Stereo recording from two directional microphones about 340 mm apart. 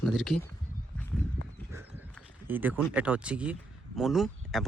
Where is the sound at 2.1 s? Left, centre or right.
Centre.